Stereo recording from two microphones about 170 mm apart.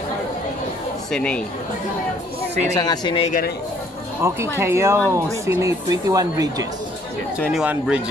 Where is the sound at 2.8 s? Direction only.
25° left (ahead or behind).